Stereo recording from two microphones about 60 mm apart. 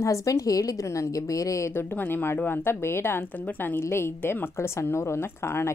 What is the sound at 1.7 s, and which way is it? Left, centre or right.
A woman's voice, left.